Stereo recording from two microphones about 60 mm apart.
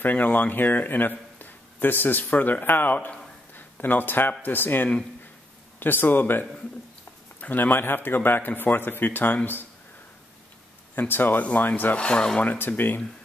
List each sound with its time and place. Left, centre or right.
0.0 s a man's voice: left
11.0 s a man's voice: left
12.0 s speech: centre
12.4 s a man's voice: left